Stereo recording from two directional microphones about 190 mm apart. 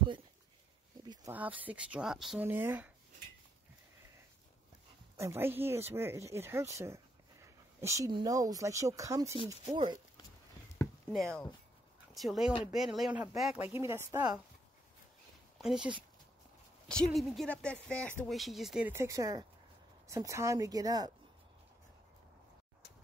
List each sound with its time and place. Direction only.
1.0 s a sound: 20° right (ahead or behind)
1.3 s speech: 10° right (ahead or behind)
5.1 s a woman's voice: 15° right (ahead or behind)
11.1 s speech: centre (ahead or behind); by 14.4 s 20° right (ahead or behind)
15.6 s a woman's voice: 5° right (ahead or behind); by 21.1 s 20° right (ahead or behind)